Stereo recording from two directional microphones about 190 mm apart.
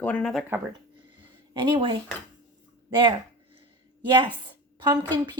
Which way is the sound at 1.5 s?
25° right (ahead or behind).